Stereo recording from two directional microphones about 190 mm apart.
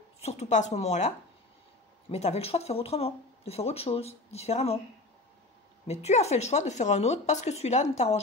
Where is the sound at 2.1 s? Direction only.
35° left (ahead or behind).